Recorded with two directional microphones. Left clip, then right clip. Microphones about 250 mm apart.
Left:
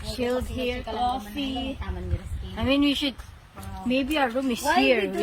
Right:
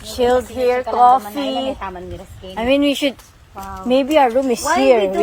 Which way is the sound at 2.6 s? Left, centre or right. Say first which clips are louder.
Right 8 dB; centre.